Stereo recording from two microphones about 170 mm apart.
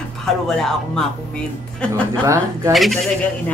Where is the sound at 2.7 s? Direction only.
Centre (ahead or behind).